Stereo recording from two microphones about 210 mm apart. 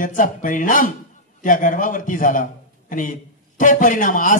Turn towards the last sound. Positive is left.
turn(degrees=40)  # may be behind; listen again after turning